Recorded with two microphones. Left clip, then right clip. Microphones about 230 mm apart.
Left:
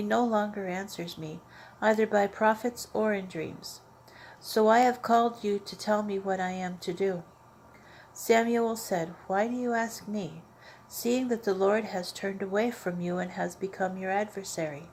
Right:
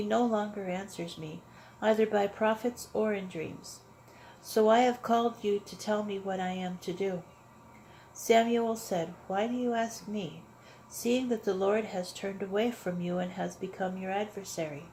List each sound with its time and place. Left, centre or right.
0.1 s speech: left
8.5 s speech: left